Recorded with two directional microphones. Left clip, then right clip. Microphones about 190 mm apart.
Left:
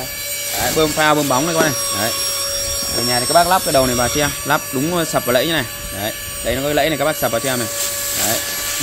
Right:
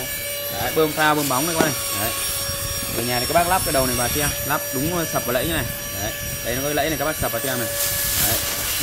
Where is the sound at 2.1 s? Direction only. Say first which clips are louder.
Left 5 dB; centre (ahead or behind).